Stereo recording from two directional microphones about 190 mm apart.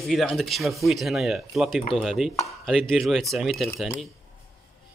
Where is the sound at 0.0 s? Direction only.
Centre (ahead or behind).